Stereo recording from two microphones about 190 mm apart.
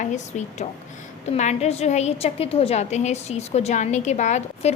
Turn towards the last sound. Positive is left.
turn(degrees=35)  # may be behind; listen again after turning